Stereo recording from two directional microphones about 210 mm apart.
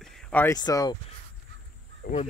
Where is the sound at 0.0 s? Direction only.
Centre (ahead or behind).